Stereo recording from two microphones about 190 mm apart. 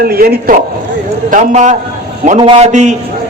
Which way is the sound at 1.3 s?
40° right (ahead or behind).